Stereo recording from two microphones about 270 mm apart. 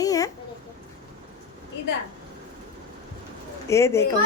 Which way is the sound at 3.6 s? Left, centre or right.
Centre.